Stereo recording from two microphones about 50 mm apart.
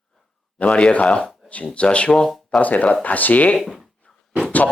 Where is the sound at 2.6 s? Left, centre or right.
Left.